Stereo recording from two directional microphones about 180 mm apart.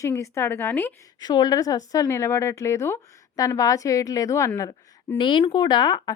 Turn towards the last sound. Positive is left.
turn(degrees=20)  # may be behind; listen again after turning